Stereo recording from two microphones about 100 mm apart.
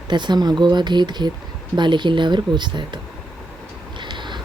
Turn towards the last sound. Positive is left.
turn(degrees=-50)  # may be behind; listen again after turning